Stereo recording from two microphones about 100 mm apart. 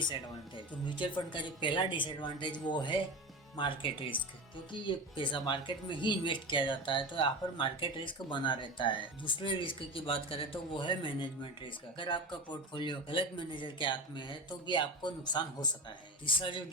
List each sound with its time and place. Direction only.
0.9 s speech: 55° left (ahead or behind)